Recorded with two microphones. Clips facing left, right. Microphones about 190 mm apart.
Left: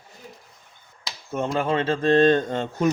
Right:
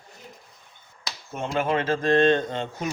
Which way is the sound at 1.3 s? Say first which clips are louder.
Left 2 dB; 35° left (ahead or behind).